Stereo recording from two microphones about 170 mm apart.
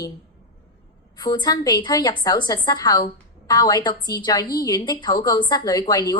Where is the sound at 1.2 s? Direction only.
25° left (ahead or behind).